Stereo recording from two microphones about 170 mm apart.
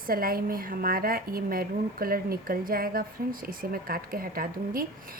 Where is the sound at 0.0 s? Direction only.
60° right (ahead or behind).